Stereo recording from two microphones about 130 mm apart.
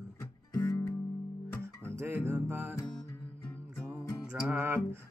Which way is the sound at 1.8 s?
20° right (ahead or behind).